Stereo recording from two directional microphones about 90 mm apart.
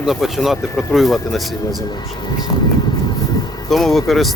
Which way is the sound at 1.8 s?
50° left (ahead or behind).